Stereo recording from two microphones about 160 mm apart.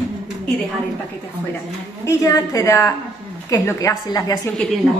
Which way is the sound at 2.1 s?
20° left (ahead or behind).